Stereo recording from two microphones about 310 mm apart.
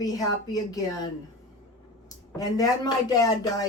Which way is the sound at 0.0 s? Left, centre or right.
Centre.